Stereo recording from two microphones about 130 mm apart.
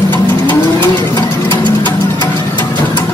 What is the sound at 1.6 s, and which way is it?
Music, 35° right (ahead or behind).